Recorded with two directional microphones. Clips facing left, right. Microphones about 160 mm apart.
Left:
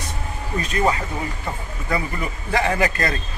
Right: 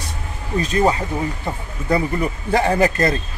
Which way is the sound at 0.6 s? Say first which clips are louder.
Right 4 dB; 35° right (ahead or behind).